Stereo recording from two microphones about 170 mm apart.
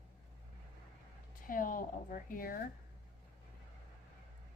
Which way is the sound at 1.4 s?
55° left (ahead or behind).